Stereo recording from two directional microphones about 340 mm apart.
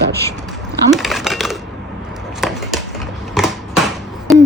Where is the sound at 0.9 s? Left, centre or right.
Centre.